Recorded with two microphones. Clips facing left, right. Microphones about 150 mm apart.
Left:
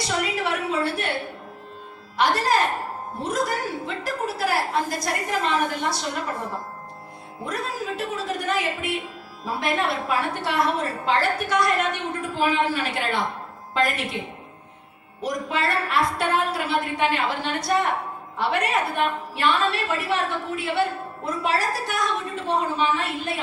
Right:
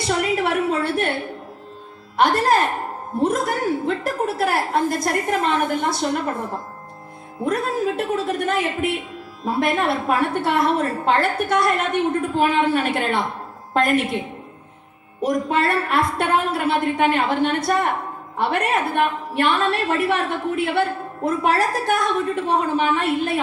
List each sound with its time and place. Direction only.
0.0 s a sound: 55° right (ahead or behind)
2.1 s a woman's voice: 50° right (ahead or behind)
7.4 s a woman's voice: 55° right (ahead or behind)
15.2 s a woman's voice: 50° right (ahead or behind)